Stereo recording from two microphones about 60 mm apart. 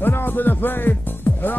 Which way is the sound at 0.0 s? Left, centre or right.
Left.